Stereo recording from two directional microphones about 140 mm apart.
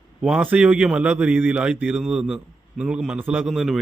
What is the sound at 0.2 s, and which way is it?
A man's voice, 5° right (ahead or behind).